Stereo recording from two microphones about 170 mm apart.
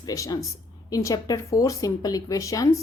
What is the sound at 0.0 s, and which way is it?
Speech, 20° left (ahead or behind).